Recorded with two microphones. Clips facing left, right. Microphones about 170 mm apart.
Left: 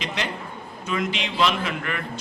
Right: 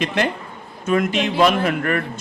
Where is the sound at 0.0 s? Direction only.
55° right (ahead or behind).